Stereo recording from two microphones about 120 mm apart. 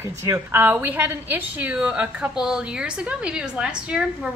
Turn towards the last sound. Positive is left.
turn(degrees=-10)  # may be behind; listen again after turning